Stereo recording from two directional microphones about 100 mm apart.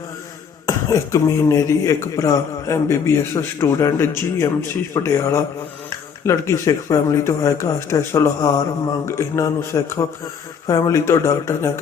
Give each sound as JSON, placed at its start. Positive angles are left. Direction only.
{"t": 0.7, "sound": "speech", "side_deg": 30}